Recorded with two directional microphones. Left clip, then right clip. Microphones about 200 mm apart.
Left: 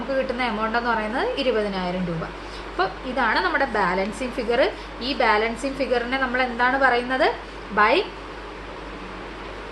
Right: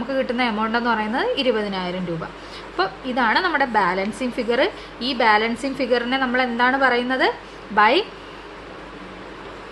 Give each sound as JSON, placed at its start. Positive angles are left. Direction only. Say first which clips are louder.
{"t": 0.1, "sound": "a woman's voice", "louder": "right 2 dB", "side_deg": -50}